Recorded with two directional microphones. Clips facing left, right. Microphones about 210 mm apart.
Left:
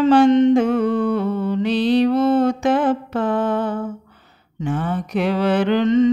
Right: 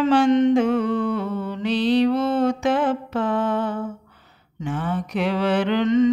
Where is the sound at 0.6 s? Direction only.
45° left (ahead or behind).